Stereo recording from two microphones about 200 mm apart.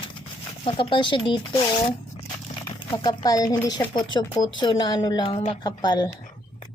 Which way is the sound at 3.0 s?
20° left (ahead or behind).